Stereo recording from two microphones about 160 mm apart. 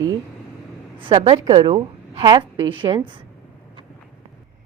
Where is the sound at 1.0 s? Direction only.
35° right (ahead or behind).